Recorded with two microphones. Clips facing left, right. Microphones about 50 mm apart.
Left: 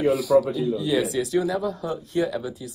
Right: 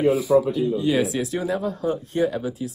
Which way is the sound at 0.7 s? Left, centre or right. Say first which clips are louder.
Right 2 dB; right.